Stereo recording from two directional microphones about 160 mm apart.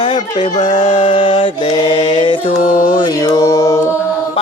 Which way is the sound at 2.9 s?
30° left (ahead or behind).